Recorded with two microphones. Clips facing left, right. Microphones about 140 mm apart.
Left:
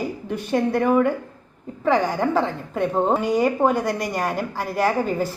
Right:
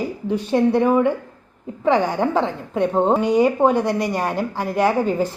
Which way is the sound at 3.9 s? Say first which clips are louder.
Right 3 dB; 10° right (ahead or behind).